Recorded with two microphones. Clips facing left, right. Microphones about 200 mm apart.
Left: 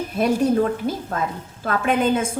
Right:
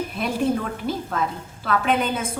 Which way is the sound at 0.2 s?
45° left (ahead or behind).